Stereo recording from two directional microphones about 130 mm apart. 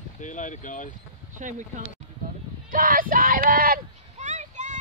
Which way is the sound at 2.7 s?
90° right.